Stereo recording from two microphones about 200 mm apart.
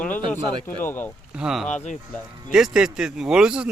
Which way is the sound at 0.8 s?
10° left (ahead or behind).